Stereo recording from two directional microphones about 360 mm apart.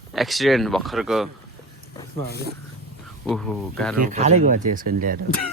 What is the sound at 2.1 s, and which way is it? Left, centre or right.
Speech, right.